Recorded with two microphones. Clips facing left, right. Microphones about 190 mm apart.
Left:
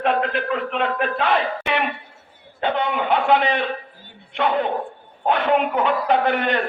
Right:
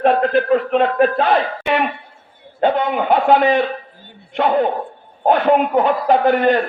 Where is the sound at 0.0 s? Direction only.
40° right (ahead or behind).